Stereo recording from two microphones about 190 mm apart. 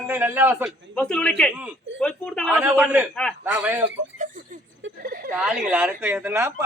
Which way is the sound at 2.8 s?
5° right (ahead or behind).